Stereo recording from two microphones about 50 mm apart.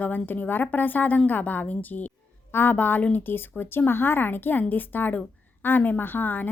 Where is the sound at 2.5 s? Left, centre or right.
Left.